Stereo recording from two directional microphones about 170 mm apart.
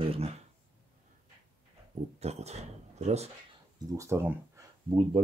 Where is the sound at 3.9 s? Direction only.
15° right (ahead or behind).